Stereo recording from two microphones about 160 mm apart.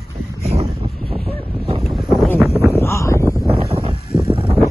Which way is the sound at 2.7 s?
15° left (ahead or behind).